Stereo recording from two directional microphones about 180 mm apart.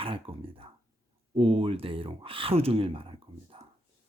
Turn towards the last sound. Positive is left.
turn(degrees=-30)  # may be behind; listen again after turning